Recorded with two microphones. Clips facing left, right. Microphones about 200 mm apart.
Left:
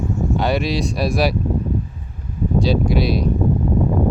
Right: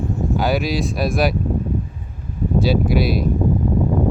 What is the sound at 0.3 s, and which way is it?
Speech, centre (ahead or behind).